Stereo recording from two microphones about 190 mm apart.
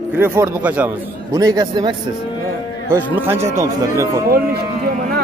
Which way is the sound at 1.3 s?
20° right (ahead or behind).